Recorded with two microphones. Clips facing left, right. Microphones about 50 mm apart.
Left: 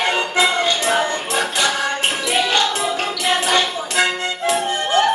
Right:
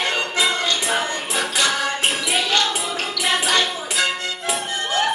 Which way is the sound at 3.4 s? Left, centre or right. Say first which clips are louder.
Left 2 dB; centre.